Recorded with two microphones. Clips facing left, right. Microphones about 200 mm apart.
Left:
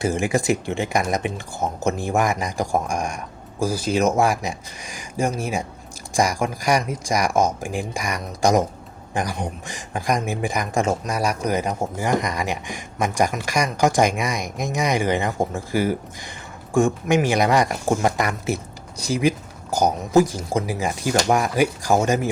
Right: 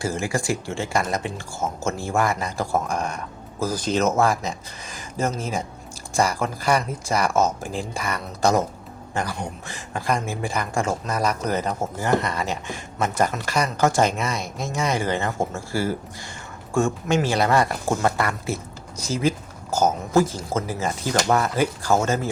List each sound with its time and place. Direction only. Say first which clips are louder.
0.0 s speech: left 4 dB; 20° left (ahead or behind)